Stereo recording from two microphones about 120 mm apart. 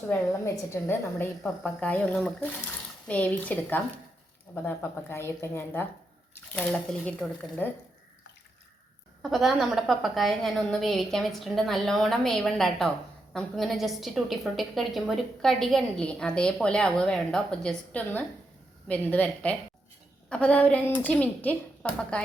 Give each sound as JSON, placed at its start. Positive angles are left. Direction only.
{"t": 0.1, "sound": "a woman's voice", "side_deg": 20}
{"t": 1.8, "sound": "a woman's voice", "side_deg": 10}
{"t": 9.2, "sound": "a woman's voice", "side_deg": 0}